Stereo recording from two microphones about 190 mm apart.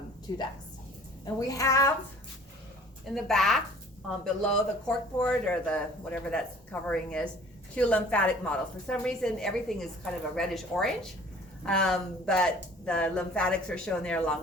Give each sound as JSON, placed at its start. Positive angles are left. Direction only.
{"t": 0.3, "sound": "a woman's voice", "side_deg": 20}
{"t": 3.2, "sound": "a woman's voice", "side_deg": 0}